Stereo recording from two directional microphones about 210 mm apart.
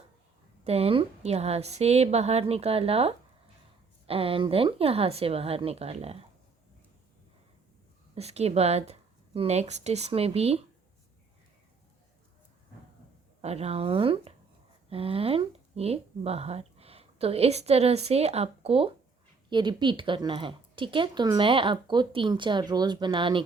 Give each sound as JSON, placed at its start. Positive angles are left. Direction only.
{"t": 0.6, "sound": "speech", "side_deg": -30}
{"t": 8.1, "sound": "speech", "side_deg": -30}
{"t": 13.4, "sound": "speech", "side_deg": -30}